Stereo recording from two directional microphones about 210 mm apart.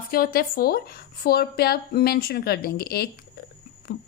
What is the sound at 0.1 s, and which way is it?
A woman's voice, 45° left (ahead or behind).